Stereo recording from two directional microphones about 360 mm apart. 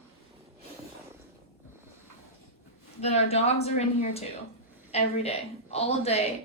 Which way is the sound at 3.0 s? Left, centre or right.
Centre.